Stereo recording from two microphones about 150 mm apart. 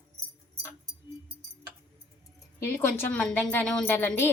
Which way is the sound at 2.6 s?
15° left (ahead or behind).